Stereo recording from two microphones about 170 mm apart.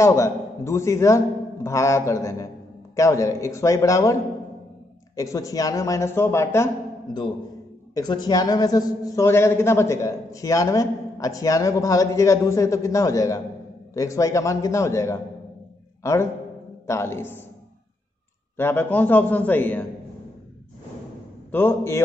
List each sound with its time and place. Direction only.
0.0 s a man's voice: 15° left (ahead or behind)
7.9 s a man's voice: 25° left (ahead or behind)
18.6 s a man's voice: 10° left (ahead or behind)
21.5 s a man's voice: 10° left (ahead or behind)